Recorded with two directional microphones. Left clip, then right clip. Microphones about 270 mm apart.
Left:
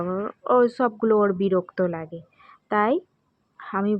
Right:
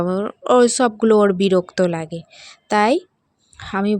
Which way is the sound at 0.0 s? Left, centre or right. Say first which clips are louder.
Right 6 dB; right.